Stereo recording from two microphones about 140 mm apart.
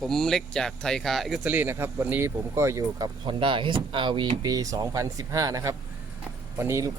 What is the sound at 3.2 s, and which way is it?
Speech, 35° right (ahead or behind).